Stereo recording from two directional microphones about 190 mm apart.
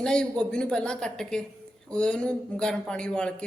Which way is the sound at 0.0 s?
5° left (ahead or behind).